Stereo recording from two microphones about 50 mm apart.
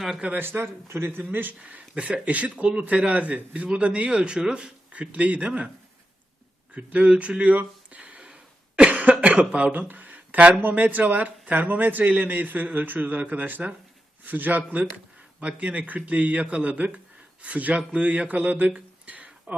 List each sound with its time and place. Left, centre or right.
0.3 s speech: right
1.5 s speech: right
6.7 s a sound: right
10.6 s a man's voice: right